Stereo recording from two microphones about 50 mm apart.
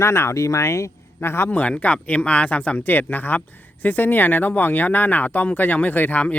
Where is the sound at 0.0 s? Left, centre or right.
Left.